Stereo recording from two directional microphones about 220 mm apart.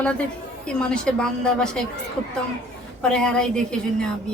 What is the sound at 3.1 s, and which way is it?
Speech, 5° left (ahead or behind).